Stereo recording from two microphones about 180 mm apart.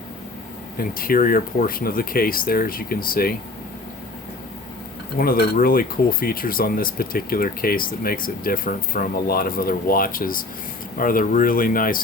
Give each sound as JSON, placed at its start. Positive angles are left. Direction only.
{"t": 0.8, "sound": "speech", "side_deg": 55}
{"t": 5.1, "sound": "speech", "side_deg": 55}